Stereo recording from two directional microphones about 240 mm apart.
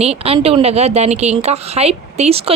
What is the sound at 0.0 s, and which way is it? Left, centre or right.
A woman's voice, right.